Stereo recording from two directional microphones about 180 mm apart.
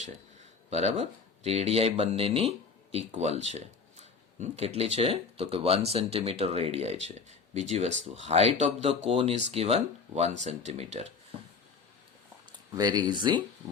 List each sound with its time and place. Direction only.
0.7 s speech: 35° right (ahead or behind)
12.7 s speech: 20° right (ahead or behind)